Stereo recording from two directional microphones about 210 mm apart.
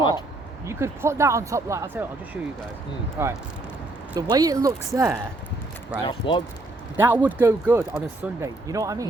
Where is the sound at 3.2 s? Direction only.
10° right (ahead or behind).